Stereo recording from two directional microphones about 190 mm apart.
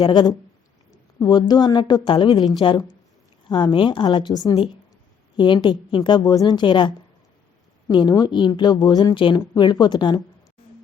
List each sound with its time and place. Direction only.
0.0 s speech: 20° left (ahead or behind)